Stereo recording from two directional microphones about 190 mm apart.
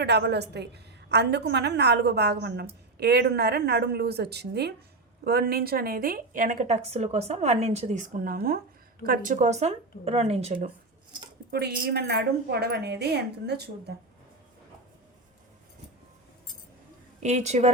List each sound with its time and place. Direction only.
0.0 s a woman's voice: 60° right (ahead or behind); by 10.7 s 40° right (ahead or behind)
11.5 s a woman's voice: 55° right (ahead or behind)
17.2 s speech: 35° right (ahead or behind)